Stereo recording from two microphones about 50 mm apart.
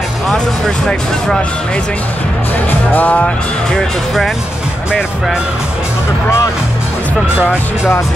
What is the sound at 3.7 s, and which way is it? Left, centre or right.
Speech, centre.